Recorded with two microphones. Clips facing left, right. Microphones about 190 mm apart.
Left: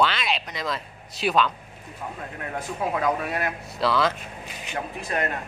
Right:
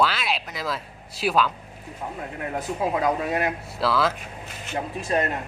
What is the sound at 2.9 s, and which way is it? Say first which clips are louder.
Speech: right 1 dB; 20° right (ahead or behind).